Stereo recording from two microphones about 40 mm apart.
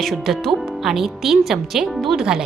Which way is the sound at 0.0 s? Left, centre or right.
Centre.